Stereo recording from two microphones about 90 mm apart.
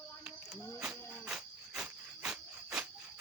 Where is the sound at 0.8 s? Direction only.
5° right (ahead or behind).